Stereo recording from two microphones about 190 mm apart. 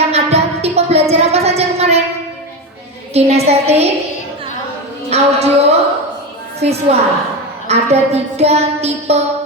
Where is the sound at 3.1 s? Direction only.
35° right (ahead or behind).